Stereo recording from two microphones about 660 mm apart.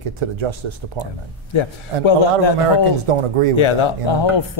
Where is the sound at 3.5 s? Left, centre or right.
Left.